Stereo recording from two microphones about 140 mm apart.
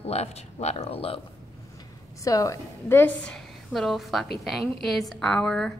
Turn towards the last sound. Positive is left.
turn(degrees=5)  # may be behind; listen again after turning